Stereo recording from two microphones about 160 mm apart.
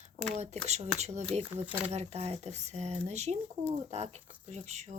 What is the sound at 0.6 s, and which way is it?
Speech, 45° right (ahead or behind).